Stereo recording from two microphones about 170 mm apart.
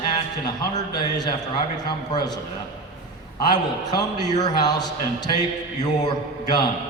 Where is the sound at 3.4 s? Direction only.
25° left (ahead or behind).